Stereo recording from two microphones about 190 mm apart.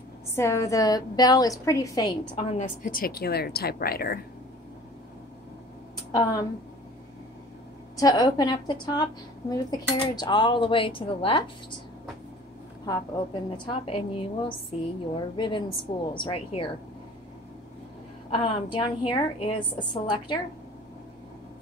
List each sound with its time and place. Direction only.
0.4 s a woman's voice: 15° left (ahead or behind)
2.5 s a woman's voice: 45° left (ahead or behind)
6.1 s a woman's voice: 20° left (ahead or behind)
8.0 s a woman's voice: 20° left (ahead or behind)
12.8 s a woman's voice: 25° left (ahead or behind)
15.1 s a woman's voice: 25° left (ahead or behind)
18.3 s a woman's voice: 25° left (ahead or behind)